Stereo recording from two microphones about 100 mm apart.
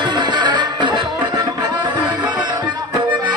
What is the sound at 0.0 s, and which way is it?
Music, 50° right (ahead or behind).